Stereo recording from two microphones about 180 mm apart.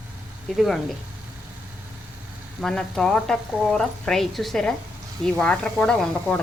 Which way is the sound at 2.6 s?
5° left (ahead or behind).